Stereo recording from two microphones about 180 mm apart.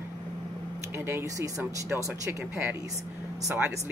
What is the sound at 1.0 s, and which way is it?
Speech, 15° right (ahead or behind).